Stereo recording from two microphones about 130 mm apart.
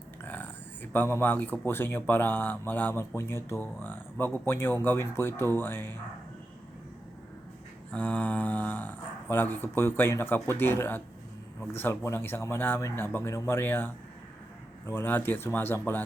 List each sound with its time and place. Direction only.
0.3 s a sound: 15° left (ahead or behind)
1.6 s speech: 15° left (ahead or behind)
7.9 s speech: 10° left (ahead or behind)